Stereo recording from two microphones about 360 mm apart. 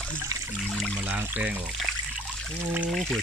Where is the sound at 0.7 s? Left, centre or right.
Centre.